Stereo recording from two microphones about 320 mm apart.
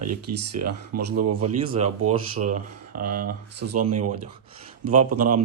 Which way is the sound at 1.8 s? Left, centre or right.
Right.